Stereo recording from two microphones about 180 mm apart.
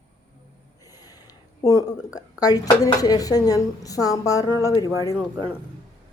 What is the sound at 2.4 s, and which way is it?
Speech, 20° left (ahead or behind).